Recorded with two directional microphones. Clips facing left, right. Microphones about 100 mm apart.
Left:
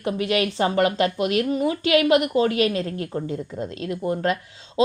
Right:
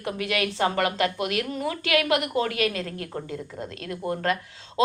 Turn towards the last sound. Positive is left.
turn(degrees=20)  # may be behind; listen again after turning